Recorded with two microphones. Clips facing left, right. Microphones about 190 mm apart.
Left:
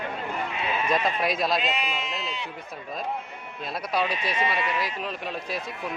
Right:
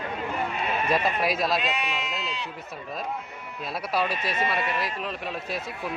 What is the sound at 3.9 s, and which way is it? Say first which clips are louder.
Speech: even; centre (ahead or behind).